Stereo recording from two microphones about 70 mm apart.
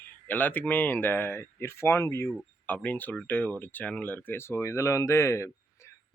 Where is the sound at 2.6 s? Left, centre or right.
Left.